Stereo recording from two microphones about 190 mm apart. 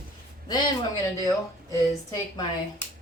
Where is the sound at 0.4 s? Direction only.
20° left (ahead or behind).